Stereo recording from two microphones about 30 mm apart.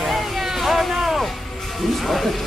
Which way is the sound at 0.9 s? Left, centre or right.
Right.